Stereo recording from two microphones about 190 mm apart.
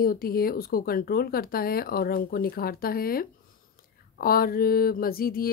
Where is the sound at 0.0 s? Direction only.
50° left (ahead or behind).